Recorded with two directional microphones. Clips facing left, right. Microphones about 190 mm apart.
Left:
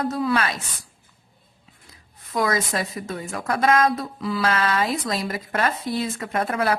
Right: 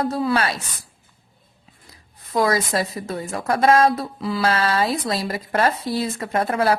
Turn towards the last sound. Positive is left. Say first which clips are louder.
# right 3 dB
turn(degrees=-30)  # may be behind; listen again after turning